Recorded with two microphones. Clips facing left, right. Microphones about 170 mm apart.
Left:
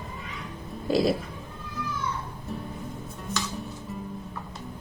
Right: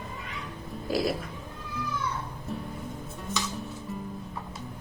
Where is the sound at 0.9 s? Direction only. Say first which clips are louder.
Left 5 dB; 25° left (ahead or behind).